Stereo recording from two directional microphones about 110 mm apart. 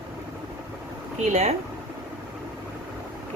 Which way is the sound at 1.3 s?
85° right.